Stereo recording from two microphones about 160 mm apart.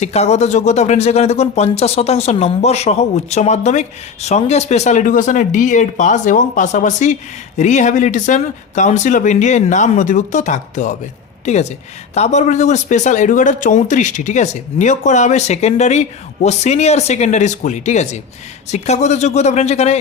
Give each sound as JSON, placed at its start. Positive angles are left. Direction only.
{"t": 0.0, "sound": "speech", "side_deg": 45}